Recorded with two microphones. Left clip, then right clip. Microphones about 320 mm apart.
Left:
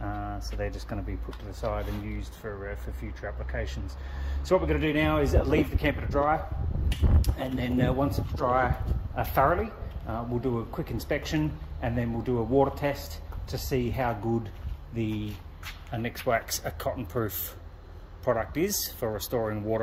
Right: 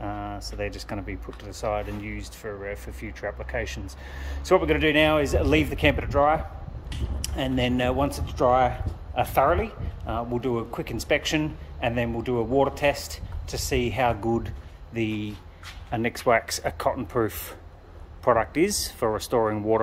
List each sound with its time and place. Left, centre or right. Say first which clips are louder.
0.0 s a sound: right 3 dB; centre
1.5 s speech: right 4 dB; centre
14.2 s speech: right 4 dB; centre